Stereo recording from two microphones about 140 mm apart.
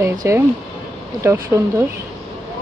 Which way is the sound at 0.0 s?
20° right (ahead or behind).